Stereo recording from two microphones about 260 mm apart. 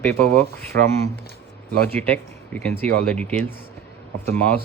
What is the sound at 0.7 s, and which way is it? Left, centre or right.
Speech, right.